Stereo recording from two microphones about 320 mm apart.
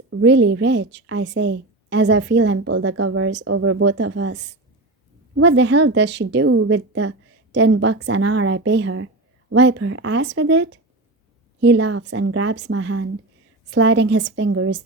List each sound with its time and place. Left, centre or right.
0.1 s a woman's voice: right